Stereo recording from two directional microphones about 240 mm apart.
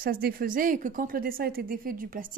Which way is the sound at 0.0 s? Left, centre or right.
Right.